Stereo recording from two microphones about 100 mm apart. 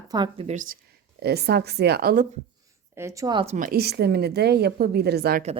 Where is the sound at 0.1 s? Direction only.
45° right (ahead or behind).